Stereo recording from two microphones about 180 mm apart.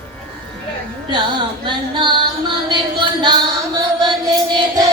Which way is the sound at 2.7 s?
25° right (ahead or behind).